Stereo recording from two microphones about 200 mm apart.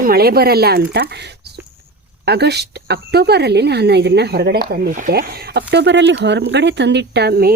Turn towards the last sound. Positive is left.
turn(degrees=-50)  # may be behind; listen again after turning